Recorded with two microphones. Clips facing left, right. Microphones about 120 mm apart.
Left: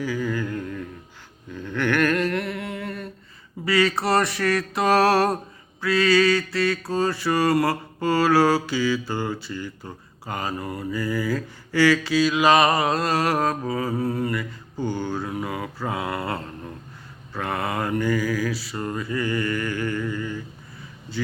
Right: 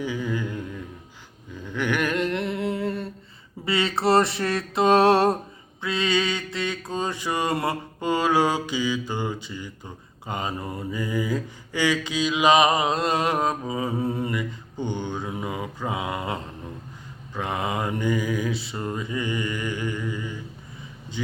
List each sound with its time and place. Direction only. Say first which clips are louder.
0.0 s mantra: left 2 dB; 20° right (ahead or behind)
1.5 s humming: left 3 dB; 15° right (ahead or behind)
3.7 s mantra: left 1 dB; 25° right (ahead or behind)